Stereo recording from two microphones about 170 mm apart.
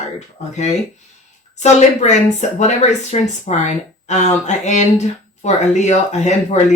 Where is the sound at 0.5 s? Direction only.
40° left (ahead or behind).